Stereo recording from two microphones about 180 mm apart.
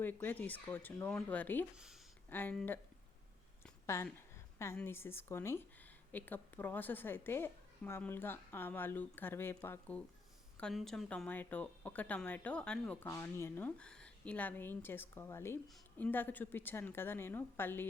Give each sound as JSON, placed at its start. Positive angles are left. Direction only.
{"t": 0.0, "sound": "a woman's voice", "side_deg": 10}
{"t": 1.7, "sound": "speech", "side_deg": -5}
{"t": 2.3, "sound": "a woman's voice", "side_deg": 10}
{"t": 3.8, "sound": "a woman's voice", "side_deg": 15}